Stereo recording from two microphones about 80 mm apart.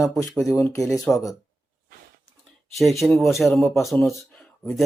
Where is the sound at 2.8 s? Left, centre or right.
Centre.